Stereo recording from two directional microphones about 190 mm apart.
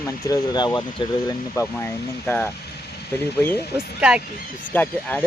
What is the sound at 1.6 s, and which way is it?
Speech, 10° left (ahead or behind).